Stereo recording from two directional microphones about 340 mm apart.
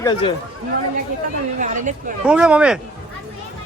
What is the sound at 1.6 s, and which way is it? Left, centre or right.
Speech, right.